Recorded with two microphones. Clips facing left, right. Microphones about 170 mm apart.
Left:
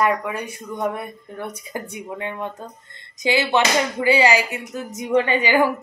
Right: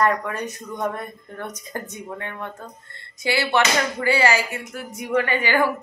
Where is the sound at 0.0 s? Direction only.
10° left (ahead or behind).